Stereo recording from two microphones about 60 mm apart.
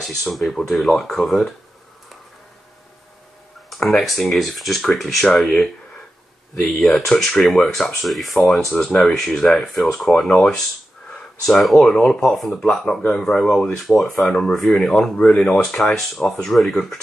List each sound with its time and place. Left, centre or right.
0.0 s speech: centre
3.7 s speech: centre
6.6 s speech: centre
11.6 s speech: centre
15.1 s speech: centre
15.8 s speech: centre